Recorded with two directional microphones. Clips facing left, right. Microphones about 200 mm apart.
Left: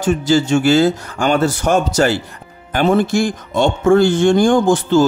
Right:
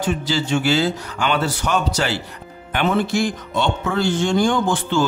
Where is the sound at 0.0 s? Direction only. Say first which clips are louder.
Left 7 dB; 45° left (ahead or behind).